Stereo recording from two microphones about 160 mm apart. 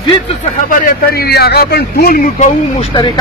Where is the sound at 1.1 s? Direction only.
75° left (ahead or behind).